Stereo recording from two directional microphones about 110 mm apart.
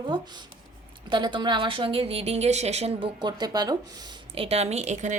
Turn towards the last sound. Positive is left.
turn(degrees=-90)